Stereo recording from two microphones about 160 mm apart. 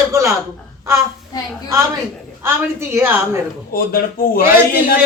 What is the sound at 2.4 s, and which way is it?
Speech, 15° right (ahead or behind).